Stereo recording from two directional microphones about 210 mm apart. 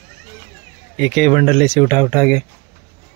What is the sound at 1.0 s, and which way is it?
Speech, 5° left (ahead or behind).